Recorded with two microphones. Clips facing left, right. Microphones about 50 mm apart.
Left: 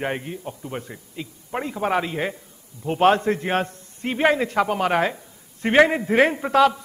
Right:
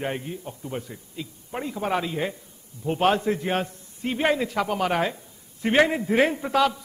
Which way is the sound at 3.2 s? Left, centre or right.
Left.